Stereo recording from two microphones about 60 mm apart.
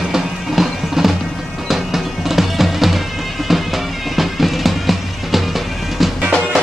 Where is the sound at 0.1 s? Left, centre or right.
Centre.